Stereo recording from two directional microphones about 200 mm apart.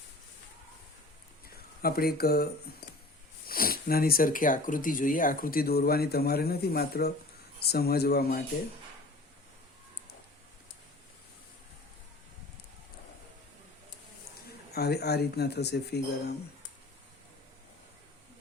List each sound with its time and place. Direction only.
1.8 s speech: 50° left (ahead or behind)
14.7 s speech: 55° left (ahead or behind)